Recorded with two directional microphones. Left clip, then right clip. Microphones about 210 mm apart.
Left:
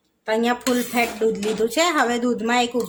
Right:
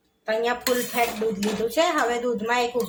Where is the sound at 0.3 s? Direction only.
35° left (ahead or behind).